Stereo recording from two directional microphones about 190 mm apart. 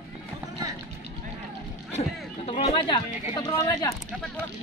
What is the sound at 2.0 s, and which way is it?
Speech, 35° left (ahead or behind).